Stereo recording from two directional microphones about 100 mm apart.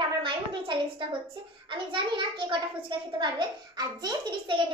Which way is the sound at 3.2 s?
45° right (ahead or behind).